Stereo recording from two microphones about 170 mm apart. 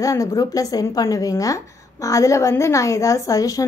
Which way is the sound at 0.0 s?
20° left (ahead or behind).